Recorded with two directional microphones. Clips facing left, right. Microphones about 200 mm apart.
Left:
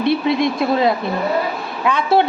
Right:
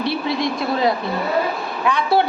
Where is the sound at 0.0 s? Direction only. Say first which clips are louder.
Left 5 dB; 20° left (ahead or behind).